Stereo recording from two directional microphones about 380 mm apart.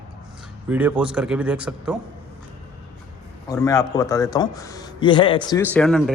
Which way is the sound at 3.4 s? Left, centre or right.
Centre.